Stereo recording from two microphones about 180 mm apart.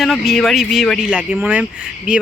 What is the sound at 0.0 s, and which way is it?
Speech, centre (ahead or behind).